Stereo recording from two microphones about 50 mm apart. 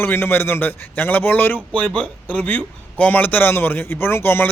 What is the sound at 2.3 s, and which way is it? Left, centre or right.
A man's voice, left.